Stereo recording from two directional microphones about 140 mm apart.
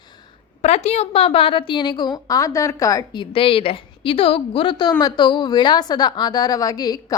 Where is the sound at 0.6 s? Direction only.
50° left (ahead or behind).